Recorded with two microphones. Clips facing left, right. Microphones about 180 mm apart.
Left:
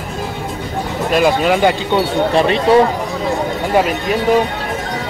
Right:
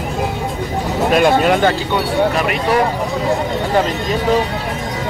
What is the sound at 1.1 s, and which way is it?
Speech, centre (ahead or behind).